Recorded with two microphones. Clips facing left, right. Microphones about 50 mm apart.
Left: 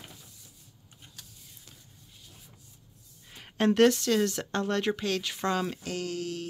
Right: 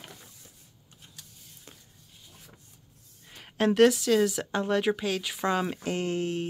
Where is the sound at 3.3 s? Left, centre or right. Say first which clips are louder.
Even; centre.